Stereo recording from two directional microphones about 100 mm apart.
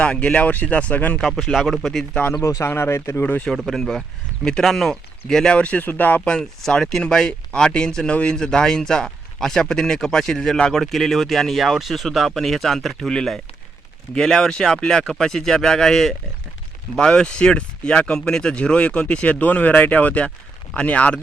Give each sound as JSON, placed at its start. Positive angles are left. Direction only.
{"t": 0.0, "sound": "speech", "side_deg": 10}
{"t": 1.3, "sound": "speech", "side_deg": 0}
{"t": 2.3, "sound": "speech", "side_deg": 30}
{"t": 3.7, "sound": "speech", "side_deg": 5}
{"t": 6.3, "sound": "speech", "side_deg": 5}